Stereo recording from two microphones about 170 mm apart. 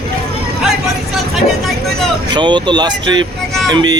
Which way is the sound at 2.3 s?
25° right (ahead or behind).